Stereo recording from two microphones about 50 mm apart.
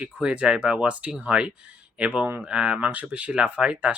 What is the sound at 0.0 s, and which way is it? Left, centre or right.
Speech, right.